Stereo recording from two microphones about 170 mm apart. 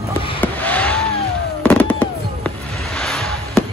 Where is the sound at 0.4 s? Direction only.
10° left (ahead or behind).